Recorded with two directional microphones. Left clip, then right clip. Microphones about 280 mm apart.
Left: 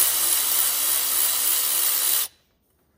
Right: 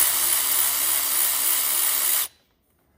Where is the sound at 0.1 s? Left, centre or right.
Centre.